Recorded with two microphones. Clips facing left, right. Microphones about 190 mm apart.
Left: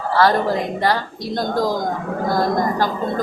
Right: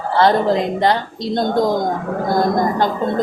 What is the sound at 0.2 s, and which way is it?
A woman's voice, 20° right (ahead or behind).